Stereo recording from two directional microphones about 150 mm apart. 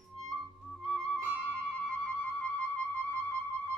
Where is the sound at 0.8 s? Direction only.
5° left (ahead or behind).